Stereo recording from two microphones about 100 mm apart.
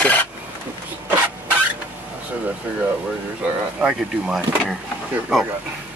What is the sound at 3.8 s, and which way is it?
Speech, 5° right (ahead or behind).